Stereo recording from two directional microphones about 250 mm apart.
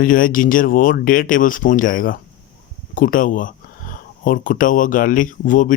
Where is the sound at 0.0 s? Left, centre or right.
Left.